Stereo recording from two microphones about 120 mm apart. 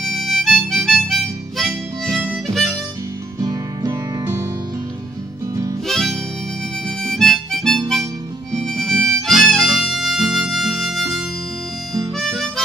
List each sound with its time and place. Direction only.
0.0 s harmonica: centre (ahead or behind)
3.3 s music: 35° right (ahead or behind)
5.9 s harmonica: 5° left (ahead or behind)